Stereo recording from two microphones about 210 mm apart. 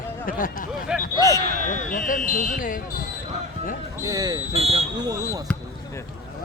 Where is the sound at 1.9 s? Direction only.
40° left (ahead or behind).